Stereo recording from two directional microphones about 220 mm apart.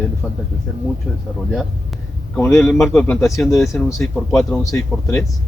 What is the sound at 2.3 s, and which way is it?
Speech, 10° left (ahead or behind).